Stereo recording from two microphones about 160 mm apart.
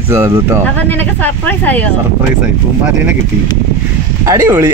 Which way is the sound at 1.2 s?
10° left (ahead or behind).